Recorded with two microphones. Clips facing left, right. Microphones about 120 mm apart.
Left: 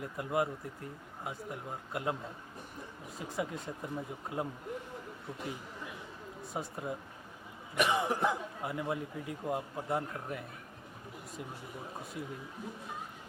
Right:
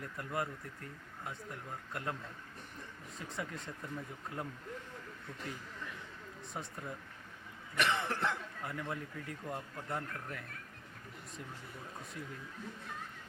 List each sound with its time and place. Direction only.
0.0 s speech: 15° left (ahead or behind)
3.2 s speech: 5° left (ahead or behind)
3.4 s speech: 20° left (ahead or behind)
4.3 s a sound: 15° left (ahead or behind)
5.5 s chatter: 15° left (ahead or behind)
6.5 s speech: 15° left (ahead or behind)
7.8 s speech: 10° left (ahead or behind)